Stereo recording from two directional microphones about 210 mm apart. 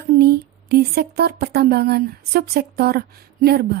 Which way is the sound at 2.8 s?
50° right (ahead or behind).